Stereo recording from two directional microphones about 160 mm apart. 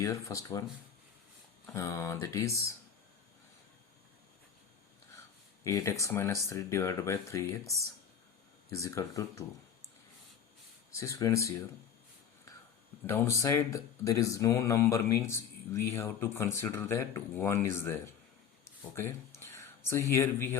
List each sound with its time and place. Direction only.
0.0 s speech: 20° left (ahead or behind)
1.6 s speech: 20° left (ahead or behind)
5.6 s speech: 20° left (ahead or behind)
8.7 s speech: 20° left (ahead or behind)
10.9 s speech: 20° left (ahead or behind)
13.4 s speech: 15° left (ahead or behind)